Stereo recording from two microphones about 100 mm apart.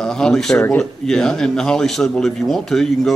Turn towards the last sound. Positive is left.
turn(degrees=5)  # may be behind; listen again after turning